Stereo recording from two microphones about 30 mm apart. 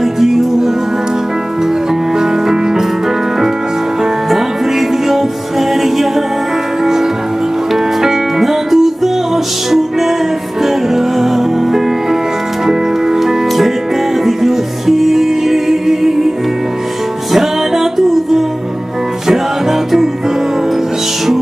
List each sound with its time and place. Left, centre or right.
0.0 s music: centre
2.1 s music: centre
4.3 s music: centre
17.3 s music: centre